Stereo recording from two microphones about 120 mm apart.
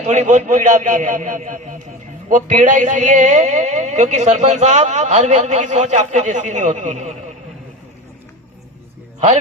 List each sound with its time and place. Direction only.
0.0 s a man's voice: 75° right (ahead or behind)